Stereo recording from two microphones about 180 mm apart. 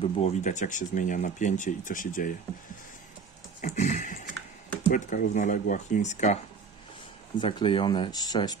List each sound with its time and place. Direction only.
0.0 s speech: 40° left (ahead or behind)
3.6 s speech: 45° left (ahead or behind)
7.3 s speech: 25° left (ahead or behind)